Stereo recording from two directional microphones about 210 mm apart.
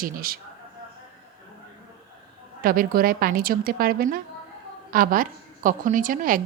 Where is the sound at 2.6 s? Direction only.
45° right (ahead or behind).